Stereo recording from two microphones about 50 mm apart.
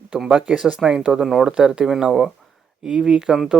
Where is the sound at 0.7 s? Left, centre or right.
Centre.